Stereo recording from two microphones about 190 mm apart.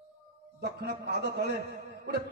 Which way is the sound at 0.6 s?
55° right (ahead or behind).